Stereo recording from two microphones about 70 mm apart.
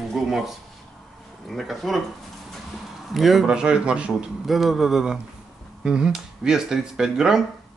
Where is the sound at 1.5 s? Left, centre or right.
Centre.